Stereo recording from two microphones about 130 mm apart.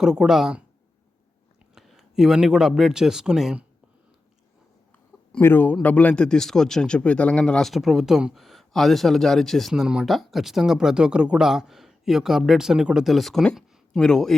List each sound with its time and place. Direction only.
0.0 s speech: 5° right (ahead or behind)
1.7 s speech: centre (ahead or behind)
5.4 s speech: 15° left (ahead or behind)